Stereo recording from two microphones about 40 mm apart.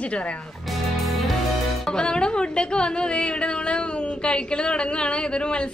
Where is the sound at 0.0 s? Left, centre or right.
Left.